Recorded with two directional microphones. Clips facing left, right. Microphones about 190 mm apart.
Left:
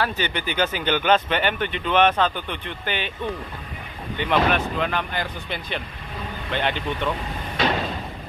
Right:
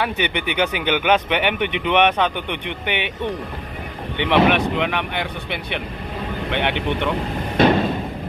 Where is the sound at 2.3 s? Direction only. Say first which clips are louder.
Right 4 dB; 70° right (ahead or behind).